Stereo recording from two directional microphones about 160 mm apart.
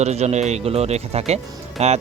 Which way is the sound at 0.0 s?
45° right (ahead or behind).